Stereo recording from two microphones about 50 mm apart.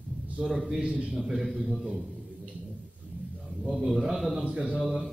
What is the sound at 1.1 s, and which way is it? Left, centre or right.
Speech, centre.